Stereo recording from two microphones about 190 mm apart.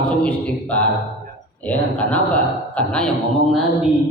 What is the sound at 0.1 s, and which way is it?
Mantra, 5° left (ahead or behind).